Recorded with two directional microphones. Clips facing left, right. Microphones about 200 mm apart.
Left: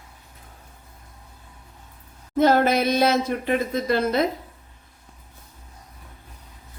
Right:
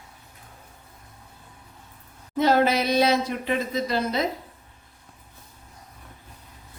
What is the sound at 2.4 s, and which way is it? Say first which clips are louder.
Speech: left 2 dB; 50° left (ahead or behind).